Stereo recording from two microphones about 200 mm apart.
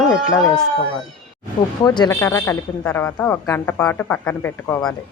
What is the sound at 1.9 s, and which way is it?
Speech, 20° left (ahead or behind).